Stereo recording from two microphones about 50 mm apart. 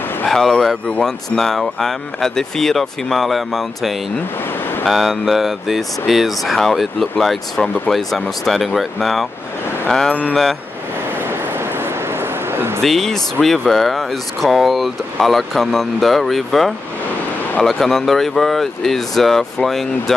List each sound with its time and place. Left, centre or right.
0.3 s speech: centre
11.2 s a sound: right
12.8 s speech: centre